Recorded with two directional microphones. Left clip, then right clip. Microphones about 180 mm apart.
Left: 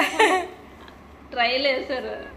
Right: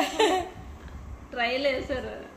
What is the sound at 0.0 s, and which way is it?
Laughter, 25° right (ahead or behind).